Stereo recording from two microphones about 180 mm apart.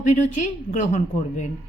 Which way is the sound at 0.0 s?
45° left (ahead or behind).